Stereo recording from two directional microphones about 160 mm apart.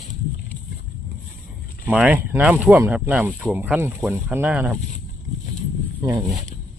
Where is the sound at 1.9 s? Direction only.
10° right (ahead or behind).